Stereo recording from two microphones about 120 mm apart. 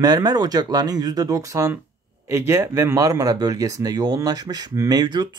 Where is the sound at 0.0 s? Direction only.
35° right (ahead or behind).